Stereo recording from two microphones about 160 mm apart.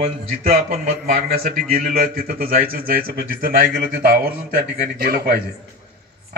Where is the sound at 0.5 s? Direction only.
70° right (ahead or behind).